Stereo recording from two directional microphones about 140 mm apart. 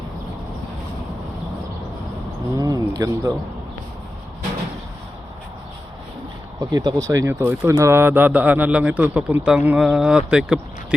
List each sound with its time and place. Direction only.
2.6 s speech: 25° right (ahead or behind)
6.6 s speech: 30° right (ahead or behind); by 10.6 s 5° right (ahead or behind)